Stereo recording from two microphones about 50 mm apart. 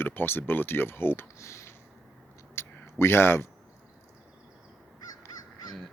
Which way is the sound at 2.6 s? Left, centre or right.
Left.